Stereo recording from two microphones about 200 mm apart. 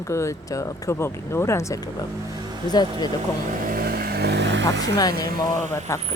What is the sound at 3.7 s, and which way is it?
Vehicle, 50° right (ahead or behind).